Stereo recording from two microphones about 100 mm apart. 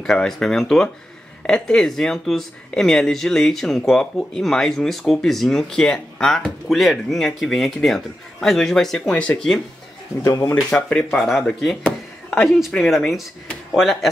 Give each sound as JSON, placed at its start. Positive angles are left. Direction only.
{"t": 0.0, "sound": "speech", "side_deg": 5}
{"t": 10.2, "sound": "speech", "side_deg": 35}
{"t": 10.5, "sound": "speech", "side_deg": 10}